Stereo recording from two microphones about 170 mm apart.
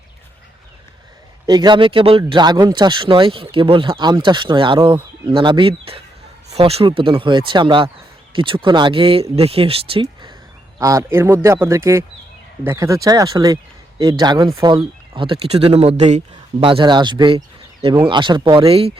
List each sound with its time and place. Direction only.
1.5 s a man's voice: 25° right (ahead or behind); by 16.2 s 45° right (ahead or behind)
16.3 s speech: 30° right (ahead or behind)